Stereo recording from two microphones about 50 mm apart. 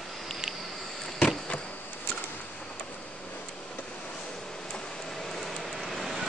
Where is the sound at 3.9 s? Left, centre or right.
Centre.